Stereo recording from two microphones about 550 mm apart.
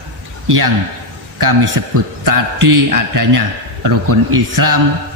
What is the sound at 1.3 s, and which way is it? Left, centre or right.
A man's voice, right.